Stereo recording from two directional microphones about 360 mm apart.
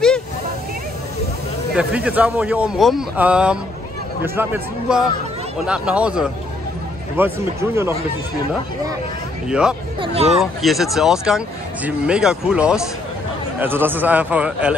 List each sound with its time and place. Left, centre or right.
1.8 s speech: centre
9.5 s speech: centre
9.9 s speech: centre
10.4 s speech: centre